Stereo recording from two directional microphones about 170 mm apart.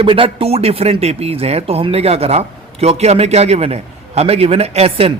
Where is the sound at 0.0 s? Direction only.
35° right (ahead or behind).